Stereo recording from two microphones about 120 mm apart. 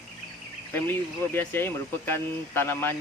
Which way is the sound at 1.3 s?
20° left (ahead or behind).